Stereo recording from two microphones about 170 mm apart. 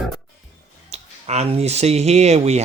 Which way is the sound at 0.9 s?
40° right (ahead or behind).